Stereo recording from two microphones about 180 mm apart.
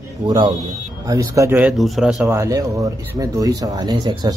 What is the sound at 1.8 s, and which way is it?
Speech, centre (ahead or behind).